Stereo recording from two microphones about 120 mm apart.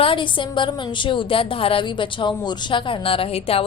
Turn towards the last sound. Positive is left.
turn(degrees=55)  # may be behind; listen again after turning